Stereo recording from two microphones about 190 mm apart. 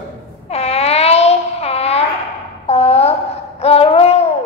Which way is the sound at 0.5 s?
35° left (ahead or behind).